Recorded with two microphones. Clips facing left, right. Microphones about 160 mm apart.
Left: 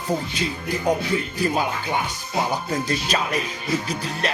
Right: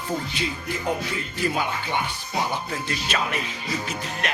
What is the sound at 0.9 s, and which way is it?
Music, 40° left (ahead or behind).